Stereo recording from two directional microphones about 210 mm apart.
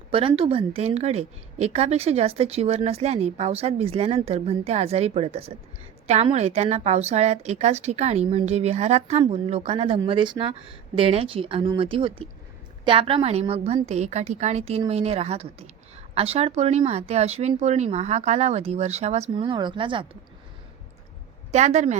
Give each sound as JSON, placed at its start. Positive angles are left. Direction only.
{"t": 0.1, "sound": "a woman's voice", "side_deg": -25}
{"t": 21.5, "sound": "a woman's voice", "side_deg": -35}